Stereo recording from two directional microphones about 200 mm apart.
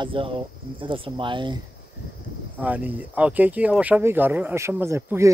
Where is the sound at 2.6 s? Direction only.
10° right (ahead or behind).